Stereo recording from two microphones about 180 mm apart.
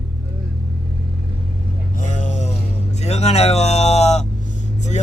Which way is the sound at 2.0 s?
45° left (ahead or behind).